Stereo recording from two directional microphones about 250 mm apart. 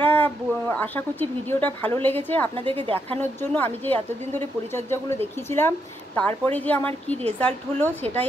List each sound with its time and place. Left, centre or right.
0.0 s speech: centre
2.5 s a woman's voice: right
3.2 s a woman's voice: centre
8.0 s a woman's voice: right